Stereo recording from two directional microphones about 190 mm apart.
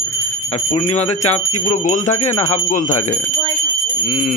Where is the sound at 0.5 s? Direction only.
35° left (ahead or behind).